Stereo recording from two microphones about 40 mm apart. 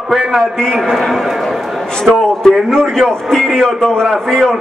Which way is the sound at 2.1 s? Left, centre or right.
Centre.